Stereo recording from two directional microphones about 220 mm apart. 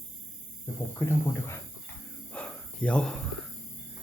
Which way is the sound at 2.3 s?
5° left (ahead or behind).